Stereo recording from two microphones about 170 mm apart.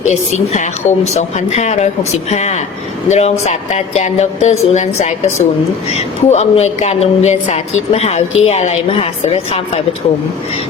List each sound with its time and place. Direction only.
0.1 s a woman's voice: 45° left (ahead or behind)